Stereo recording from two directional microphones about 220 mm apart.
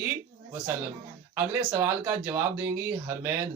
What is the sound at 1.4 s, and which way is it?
Speech, 10° right (ahead or behind).